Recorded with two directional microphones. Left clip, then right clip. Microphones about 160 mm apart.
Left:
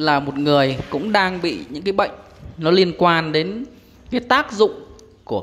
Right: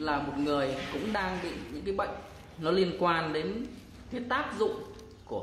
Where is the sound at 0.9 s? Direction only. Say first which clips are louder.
Left 11 dB; 45° left (ahead or behind).